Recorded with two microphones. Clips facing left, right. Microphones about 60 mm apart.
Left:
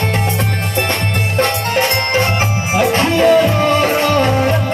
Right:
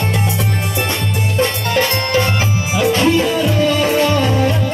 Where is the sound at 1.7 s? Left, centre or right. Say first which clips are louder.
Left 1 dB; left.